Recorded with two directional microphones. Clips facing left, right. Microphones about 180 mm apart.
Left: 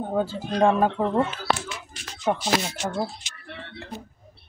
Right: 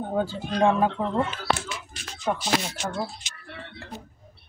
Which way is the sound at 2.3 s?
20° left (ahead or behind).